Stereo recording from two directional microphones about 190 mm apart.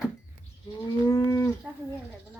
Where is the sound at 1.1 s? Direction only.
15° left (ahead or behind).